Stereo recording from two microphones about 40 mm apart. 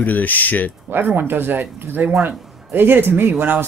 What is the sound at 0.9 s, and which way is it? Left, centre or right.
Speech, right.